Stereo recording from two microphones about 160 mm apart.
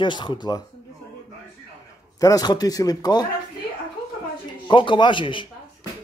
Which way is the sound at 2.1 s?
20° left (ahead or behind).